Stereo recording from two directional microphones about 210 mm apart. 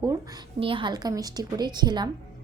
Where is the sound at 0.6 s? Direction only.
25° right (ahead or behind).